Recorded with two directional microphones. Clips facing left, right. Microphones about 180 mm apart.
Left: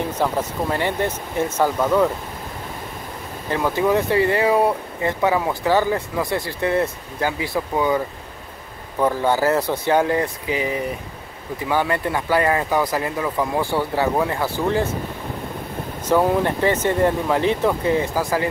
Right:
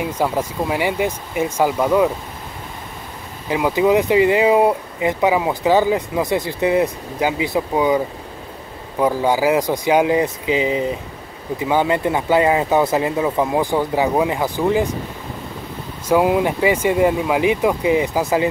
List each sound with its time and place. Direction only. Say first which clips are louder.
0.2 s speech: right 2 dB; 10° right (ahead or behind)
3.4 s speech: right 3 dB; 10° right (ahead or behind)
9.0 s speech: right 2 dB; 10° right (ahead or behind)
16.1 s speech: right 2 dB; 10° right (ahead or behind)